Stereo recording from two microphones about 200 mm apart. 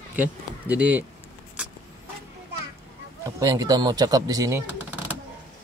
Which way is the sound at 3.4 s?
15° right (ahead or behind).